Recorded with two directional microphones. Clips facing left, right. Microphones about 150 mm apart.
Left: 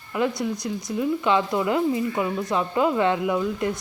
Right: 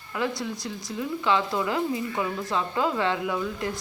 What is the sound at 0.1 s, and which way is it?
Speech, 20° left (ahead or behind).